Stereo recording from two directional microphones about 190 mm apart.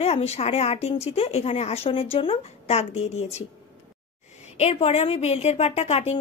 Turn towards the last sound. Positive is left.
turn(degrees=35)  # may be behind; listen again after turning